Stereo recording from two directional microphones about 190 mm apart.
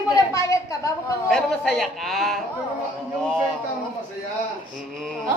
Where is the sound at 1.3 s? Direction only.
Centre (ahead or behind).